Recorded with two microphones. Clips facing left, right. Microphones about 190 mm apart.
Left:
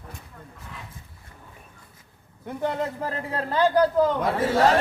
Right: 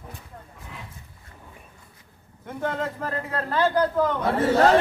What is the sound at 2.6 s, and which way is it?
Speech, 15° left (ahead or behind).